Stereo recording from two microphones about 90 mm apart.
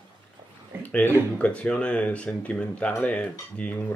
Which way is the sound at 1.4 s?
15° left (ahead or behind).